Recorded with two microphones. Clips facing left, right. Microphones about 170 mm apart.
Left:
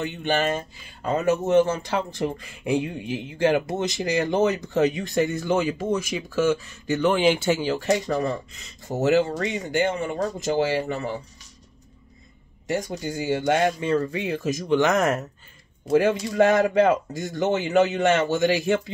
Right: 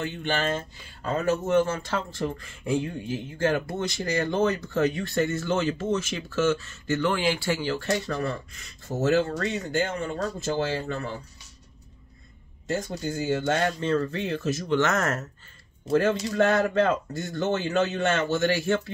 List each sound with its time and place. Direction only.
0.0 s speech: 15° left (ahead or behind)
12.7 s speech: 15° left (ahead or behind)